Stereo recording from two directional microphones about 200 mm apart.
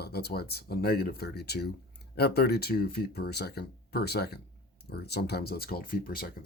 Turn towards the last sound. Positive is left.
turn(degrees=45)  # may be behind; listen again after turning